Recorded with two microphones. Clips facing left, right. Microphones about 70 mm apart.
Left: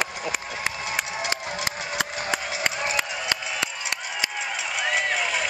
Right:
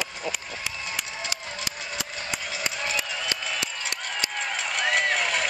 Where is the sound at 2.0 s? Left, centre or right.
Left.